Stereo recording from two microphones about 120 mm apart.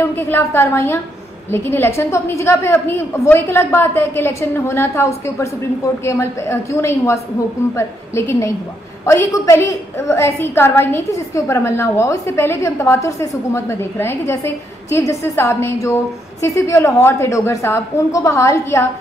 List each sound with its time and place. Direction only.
0.0 s a woman's voice: 20° left (ahead or behind)